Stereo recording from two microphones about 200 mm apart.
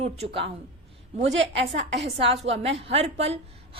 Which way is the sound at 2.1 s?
30° right (ahead or behind).